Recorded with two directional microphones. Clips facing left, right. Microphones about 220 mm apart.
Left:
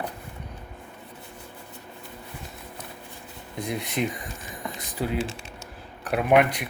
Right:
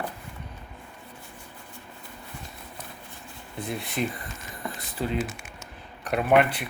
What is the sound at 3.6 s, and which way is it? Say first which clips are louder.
Speech: left 2 dB; 15° left (ahead or behind).